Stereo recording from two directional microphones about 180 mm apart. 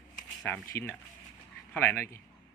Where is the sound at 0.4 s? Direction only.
10° left (ahead or behind).